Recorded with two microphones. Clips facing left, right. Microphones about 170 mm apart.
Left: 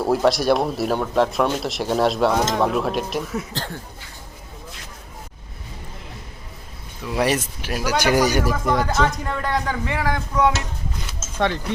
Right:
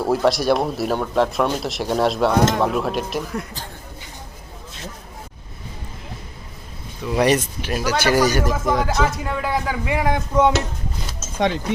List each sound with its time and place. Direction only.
0.0 s speech: centre (ahead or behind)
7.0 s speech: 5° left (ahead or behind)
8.5 s speech: centre (ahead or behind)